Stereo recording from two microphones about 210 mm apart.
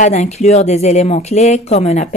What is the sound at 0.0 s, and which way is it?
A woman's voice, 35° left (ahead or behind).